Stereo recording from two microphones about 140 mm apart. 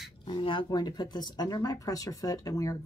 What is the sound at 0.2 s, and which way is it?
Speech, 40° left (ahead or behind).